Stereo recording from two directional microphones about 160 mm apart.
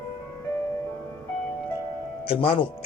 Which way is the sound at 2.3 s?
35° left (ahead or behind).